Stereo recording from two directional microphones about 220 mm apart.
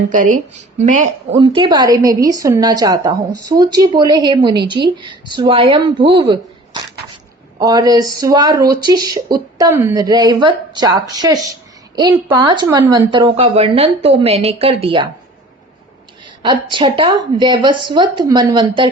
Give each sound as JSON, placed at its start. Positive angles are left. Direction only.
{"t": 0.1, "sound": "speech", "side_deg": -35}
{"t": 1.4, "sound": "a woman's voice", "side_deg": -20}
{"t": 16.4, "sound": "a woman's voice", "side_deg": -20}